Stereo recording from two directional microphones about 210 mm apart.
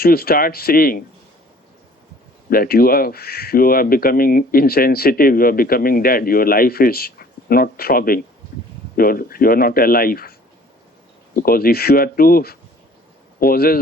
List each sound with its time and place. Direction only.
0.0 s speech: 45° left (ahead or behind)
2.5 s speech: 45° left (ahead or behind)
11.3 s speech: 45° left (ahead or behind)